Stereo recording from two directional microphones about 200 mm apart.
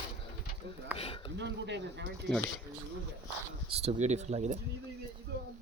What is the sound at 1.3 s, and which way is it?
Dishes, 60° right (ahead or behind).